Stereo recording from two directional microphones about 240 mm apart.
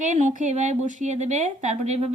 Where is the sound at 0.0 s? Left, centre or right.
Right.